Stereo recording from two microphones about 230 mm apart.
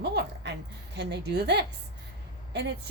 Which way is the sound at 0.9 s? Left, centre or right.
Right.